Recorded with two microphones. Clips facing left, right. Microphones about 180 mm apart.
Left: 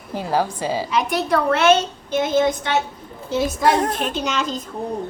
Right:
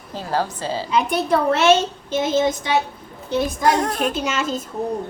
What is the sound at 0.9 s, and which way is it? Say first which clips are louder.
A child's voice: right 3 dB; 30° right (ahead or behind).